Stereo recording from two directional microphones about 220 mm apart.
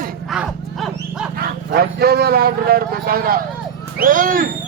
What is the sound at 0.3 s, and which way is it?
Roaring cats, 5° right (ahead or behind).